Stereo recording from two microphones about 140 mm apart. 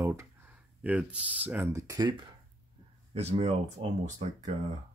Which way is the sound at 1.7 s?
25° right (ahead or behind).